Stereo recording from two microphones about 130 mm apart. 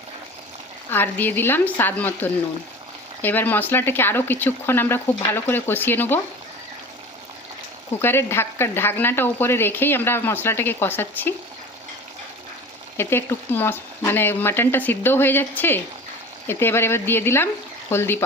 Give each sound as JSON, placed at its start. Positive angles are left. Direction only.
{"t": 0.9, "sound": "speech", "side_deg": 15}
{"t": 8.0, "sound": "speech", "side_deg": 20}
{"t": 13.0, "sound": "speech", "side_deg": 20}